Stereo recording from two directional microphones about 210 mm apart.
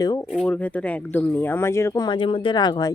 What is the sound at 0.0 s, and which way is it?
Speech, 15° left (ahead or behind).